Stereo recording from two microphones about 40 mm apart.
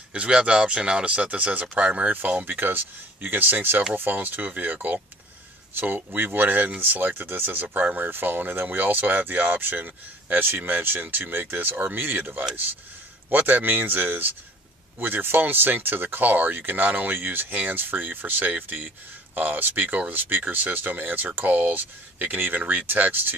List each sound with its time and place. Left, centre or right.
0.1 s speech: right
2.5 s speech: right
5.8 s speech: right